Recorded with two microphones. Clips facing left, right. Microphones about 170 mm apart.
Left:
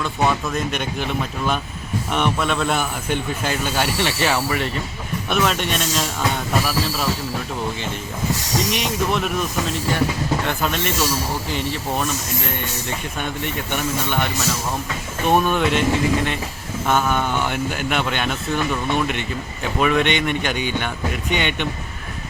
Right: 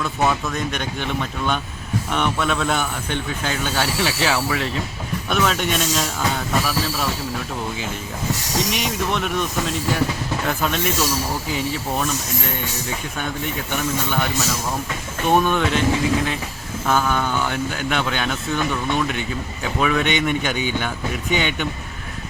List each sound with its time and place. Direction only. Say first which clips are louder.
0.0 s speech: even; centre (ahead or behind)
8.7 s speech: left 2 dB; centre (ahead or behind)
13.7 s speech: even; centre (ahead or behind)